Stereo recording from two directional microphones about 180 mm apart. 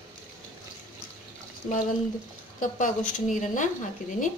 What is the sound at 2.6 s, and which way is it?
Speech, 45° left (ahead or behind).